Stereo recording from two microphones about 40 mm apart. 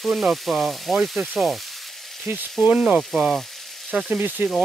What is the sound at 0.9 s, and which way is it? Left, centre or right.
Sizzle, centre.